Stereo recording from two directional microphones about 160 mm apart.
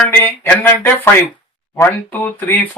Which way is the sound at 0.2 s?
15° left (ahead or behind).